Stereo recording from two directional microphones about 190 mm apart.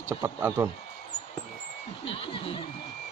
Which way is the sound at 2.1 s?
30° left (ahead or behind).